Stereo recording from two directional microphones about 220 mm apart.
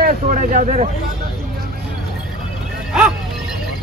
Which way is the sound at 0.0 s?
40° right (ahead or behind).